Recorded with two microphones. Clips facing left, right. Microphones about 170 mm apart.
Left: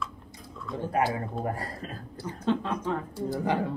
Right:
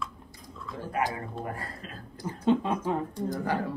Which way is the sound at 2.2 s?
10° right (ahead or behind).